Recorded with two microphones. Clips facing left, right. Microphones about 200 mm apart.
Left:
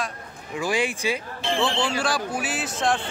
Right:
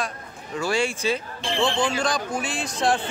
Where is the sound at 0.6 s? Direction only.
15° left (ahead or behind).